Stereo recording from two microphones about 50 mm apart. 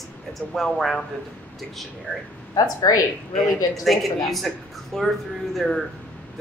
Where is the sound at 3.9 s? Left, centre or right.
Centre.